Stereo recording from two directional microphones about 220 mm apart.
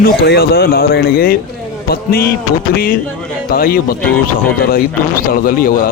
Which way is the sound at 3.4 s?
40° left (ahead or behind).